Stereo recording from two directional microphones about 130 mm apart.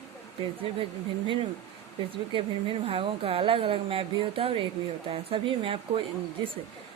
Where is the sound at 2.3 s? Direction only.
45° right (ahead or behind).